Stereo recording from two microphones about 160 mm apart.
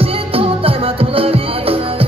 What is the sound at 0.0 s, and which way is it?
Music, 35° right (ahead or behind).